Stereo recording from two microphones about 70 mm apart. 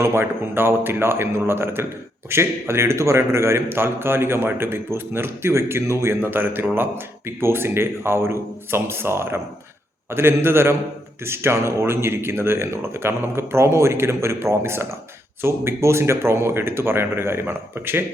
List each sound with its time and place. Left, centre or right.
0.0 s a man's voice: right